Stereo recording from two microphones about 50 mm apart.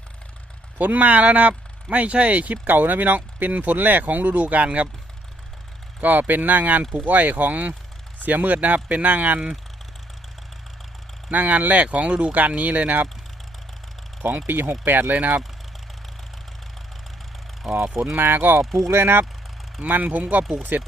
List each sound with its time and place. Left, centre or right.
0.8 s speech: right
6.0 s speech: right
11.3 s speech: right
14.3 s speech: right
17.6 s speech: centre
18.2 s speech: right
19.8 s speech: right